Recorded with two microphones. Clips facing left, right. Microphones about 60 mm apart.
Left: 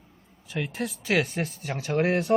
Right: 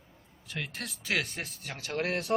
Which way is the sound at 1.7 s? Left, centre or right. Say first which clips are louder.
Left 8 dB; centre.